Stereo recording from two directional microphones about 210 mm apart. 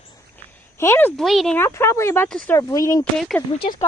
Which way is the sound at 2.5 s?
15° left (ahead or behind).